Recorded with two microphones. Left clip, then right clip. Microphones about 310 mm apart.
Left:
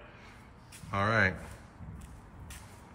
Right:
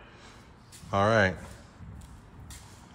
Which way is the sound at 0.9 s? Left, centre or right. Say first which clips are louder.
Right 4 dB; centre.